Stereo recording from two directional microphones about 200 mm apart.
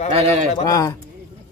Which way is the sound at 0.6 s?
15° left (ahead or behind).